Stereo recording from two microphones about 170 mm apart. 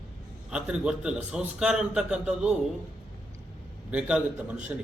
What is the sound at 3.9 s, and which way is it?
Speech, 5° right (ahead or behind).